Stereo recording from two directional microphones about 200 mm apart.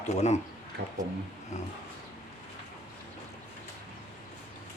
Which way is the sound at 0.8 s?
55° right (ahead or behind).